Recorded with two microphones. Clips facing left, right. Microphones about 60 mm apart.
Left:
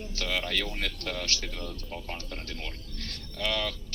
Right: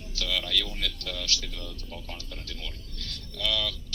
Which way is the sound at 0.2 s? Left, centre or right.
Left.